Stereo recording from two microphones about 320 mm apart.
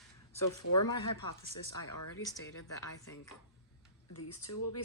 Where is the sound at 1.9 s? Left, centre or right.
Left.